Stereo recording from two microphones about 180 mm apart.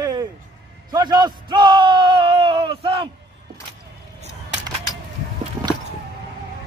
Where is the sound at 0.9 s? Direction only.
20° right (ahead or behind).